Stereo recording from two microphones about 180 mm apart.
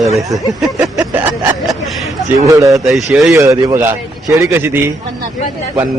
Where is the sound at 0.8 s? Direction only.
15° right (ahead or behind).